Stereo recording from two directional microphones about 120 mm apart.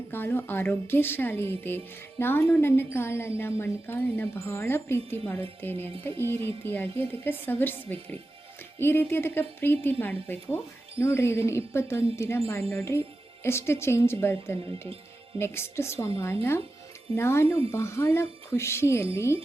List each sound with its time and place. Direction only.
0.1 s speech: 15° left (ahead or behind)